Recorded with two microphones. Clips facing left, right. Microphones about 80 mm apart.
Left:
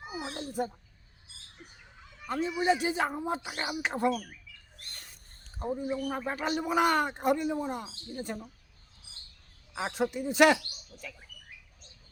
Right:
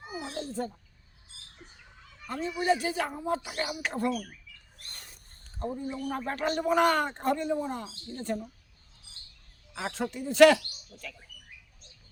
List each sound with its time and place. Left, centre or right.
0.0 s a sound: centre
2.2 s speech: centre
5.5 s a man's voice: centre
9.7 s speech: centre